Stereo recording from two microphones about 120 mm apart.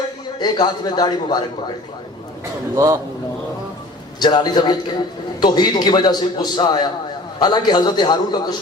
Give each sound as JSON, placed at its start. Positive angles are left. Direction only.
{"t": 0.3, "sound": "a man's voice", "side_deg": 35}
{"t": 2.7, "sound": "a man's voice", "side_deg": -25}
{"t": 4.2, "sound": "a man's voice", "side_deg": 35}